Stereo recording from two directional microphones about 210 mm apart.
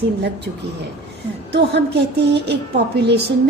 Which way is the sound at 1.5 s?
50° right (ahead or behind).